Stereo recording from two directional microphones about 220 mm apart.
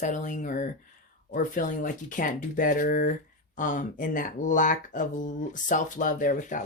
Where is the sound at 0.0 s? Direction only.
35° left (ahead or behind).